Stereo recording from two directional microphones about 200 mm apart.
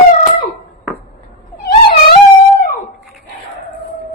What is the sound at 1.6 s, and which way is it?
Wail, 50° left (ahead or behind).